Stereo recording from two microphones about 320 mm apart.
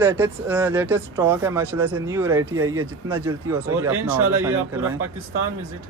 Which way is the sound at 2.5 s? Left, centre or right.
Right.